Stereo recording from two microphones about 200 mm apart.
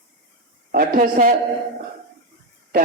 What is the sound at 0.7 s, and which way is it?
Speech, 45° right (ahead or behind).